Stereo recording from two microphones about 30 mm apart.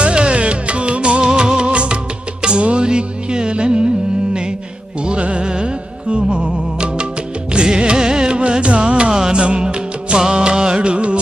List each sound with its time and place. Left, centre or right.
0.0 s music: right
5.2 s music: right
9.1 s music: right
9.4 s music: right
9.6 s music: right